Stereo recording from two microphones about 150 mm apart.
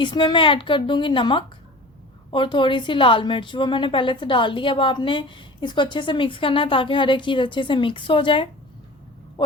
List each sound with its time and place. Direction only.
0.0 s a woman's voice: 30° left (ahead or behind)